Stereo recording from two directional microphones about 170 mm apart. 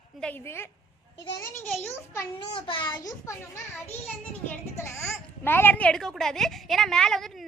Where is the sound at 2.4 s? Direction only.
30° left (ahead or behind).